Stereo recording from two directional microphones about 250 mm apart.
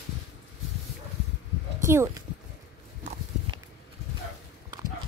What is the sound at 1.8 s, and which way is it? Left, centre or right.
Speech, centre.